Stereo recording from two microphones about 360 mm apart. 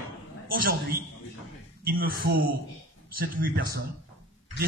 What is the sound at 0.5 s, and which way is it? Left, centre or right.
A man's voice, right.